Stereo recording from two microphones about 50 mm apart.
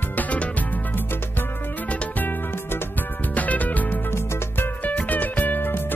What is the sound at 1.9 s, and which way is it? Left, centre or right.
Music, left.